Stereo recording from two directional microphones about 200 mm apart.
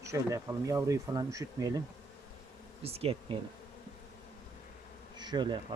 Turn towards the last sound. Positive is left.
turn(degrees=-20)  # may be behind; listen again after turning